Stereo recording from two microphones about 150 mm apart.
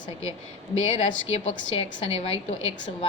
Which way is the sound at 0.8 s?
40° left (ahead or behind).